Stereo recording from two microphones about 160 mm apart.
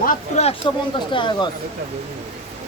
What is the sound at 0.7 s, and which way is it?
Speech, 30° left (ahead or behind).